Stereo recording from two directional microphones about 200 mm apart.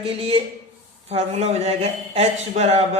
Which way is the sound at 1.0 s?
30° right (ahead or behind).